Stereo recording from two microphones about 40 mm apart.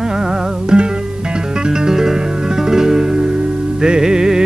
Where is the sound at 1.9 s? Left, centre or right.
Centre.